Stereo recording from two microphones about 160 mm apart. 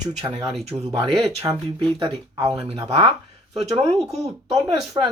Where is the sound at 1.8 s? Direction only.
35° right (ahead or behind).